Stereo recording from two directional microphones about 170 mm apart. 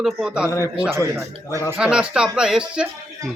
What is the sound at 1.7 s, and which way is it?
Speech, 5° right (ahead or behind).